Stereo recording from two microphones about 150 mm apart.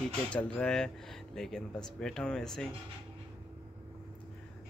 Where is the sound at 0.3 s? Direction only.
5° left (ahead or behind).